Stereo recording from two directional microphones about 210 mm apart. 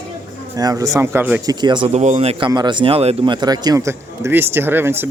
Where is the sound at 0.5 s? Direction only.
15° right (ahead or behind).